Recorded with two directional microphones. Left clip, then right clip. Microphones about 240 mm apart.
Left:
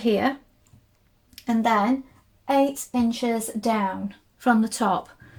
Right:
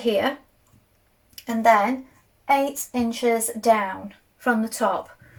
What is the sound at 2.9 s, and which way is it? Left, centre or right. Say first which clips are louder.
Speech: right 3 dB; left.